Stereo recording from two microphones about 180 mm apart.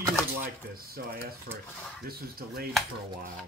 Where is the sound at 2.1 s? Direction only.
55° right (ahead or behind).